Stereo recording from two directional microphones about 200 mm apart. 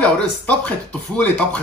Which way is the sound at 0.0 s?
5° left (ahead or behind).